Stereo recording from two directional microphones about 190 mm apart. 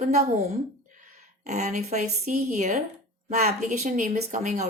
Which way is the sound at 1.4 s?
35° right (ahead or behind).